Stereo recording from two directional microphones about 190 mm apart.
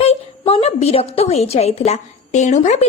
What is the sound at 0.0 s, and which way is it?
A woman's voice, 30° left (ahead or behind).